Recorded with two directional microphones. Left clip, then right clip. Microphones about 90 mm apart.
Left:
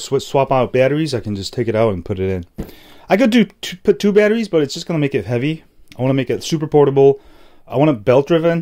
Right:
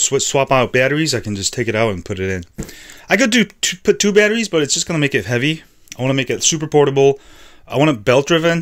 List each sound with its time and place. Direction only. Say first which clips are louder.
0.4 s speech: even; 10° left (ahead or behind)
1.0 s speech: right 3 dB; 25° left (ahead or behind)
3.3 s speech: right 1 dB; 30° left (ahead or behind)
4.9 s speech: left 1 dB; 25° left (ahead or behind)
5.9 s speech: even; 40° left (ahead or behind)
7.7 s speech: even; 15° left (ahead or behind)